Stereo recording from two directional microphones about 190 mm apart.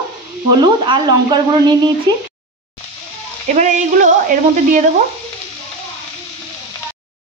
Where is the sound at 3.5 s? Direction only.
40° right (ahead or behind).